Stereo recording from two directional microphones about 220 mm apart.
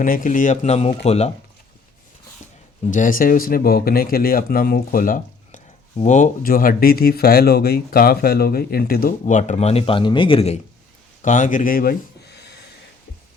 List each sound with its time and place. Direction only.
0.0 s speech: 35° left (ahead or behind)
2.9 s speech: 35° left (ahead or behind)